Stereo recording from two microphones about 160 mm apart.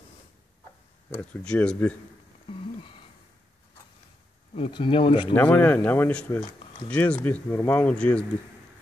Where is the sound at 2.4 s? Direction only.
35° left (ahead or behind).